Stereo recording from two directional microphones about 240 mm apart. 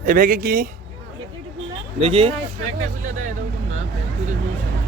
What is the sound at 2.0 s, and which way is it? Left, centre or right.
Speech, right.